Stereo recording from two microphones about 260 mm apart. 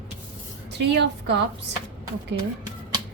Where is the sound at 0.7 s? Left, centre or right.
Right.